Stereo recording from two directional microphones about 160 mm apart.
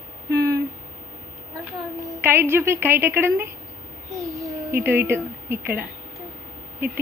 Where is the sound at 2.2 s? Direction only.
15° right (ahead or behind).